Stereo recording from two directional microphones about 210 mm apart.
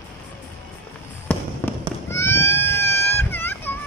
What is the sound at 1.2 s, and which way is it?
Fireworks, 10° left (ahead or behind).